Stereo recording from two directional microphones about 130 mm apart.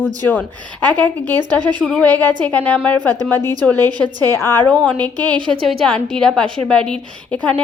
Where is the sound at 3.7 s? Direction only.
30° right (ahead or behind).